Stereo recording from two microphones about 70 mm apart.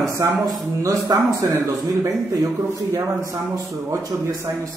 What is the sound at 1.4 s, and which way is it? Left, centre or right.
Speech, right.